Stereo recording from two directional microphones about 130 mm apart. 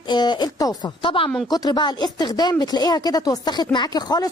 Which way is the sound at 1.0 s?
45° left (ahead or behind).